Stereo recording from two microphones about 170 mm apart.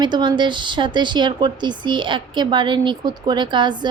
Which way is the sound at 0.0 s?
25° right (ahead or behind).